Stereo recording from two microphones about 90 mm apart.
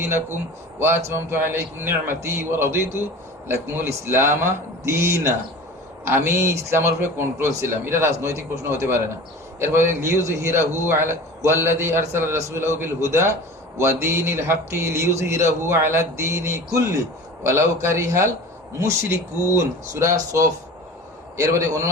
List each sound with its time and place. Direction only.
0.8 s a man's voice: 25° right (ahead or behind)